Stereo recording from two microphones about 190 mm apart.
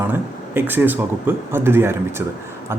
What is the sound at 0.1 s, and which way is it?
Speech, 10° right (ahead or behind).